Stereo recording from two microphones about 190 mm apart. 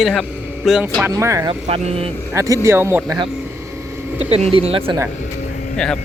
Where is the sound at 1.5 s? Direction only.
30° right (ahead or behind).